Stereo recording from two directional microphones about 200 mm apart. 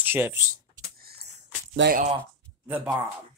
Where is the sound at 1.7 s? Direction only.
50° right (ahead or behind).